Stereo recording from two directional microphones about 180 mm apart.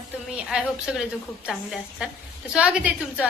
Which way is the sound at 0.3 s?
5° right (ahead or behind).